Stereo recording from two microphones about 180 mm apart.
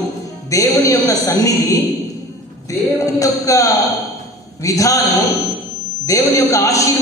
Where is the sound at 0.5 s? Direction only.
20° left (ahead or behind).